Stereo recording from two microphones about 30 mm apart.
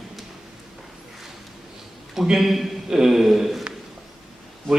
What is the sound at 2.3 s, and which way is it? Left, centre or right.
A man's voice, centre.